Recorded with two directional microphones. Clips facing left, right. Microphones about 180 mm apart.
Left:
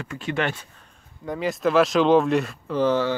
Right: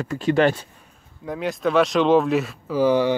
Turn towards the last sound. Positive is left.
turn(degrees=-10)  # may be behind; listen again after turning